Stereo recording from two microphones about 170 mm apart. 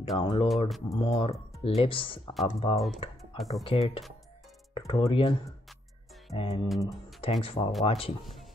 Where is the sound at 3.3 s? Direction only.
Centre (ahead or behind).